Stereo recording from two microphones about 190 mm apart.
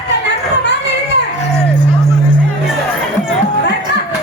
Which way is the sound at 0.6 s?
65° left (ahead or behind).